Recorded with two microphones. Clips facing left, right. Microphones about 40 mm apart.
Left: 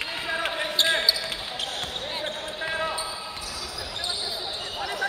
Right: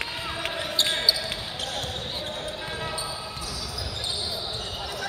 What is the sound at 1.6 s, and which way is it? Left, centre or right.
Basketball bounce, left.